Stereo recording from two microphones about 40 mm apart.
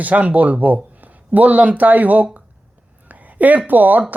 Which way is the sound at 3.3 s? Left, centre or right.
Right.